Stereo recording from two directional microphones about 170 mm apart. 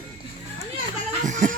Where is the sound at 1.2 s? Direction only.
50° right (ahead or behind).